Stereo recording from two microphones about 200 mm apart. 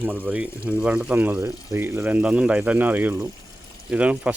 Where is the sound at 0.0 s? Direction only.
10° right (ahead or behind).